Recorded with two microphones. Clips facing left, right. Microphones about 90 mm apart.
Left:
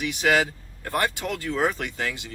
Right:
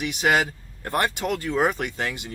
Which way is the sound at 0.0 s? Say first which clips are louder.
Even; 20° right (ahead or behind).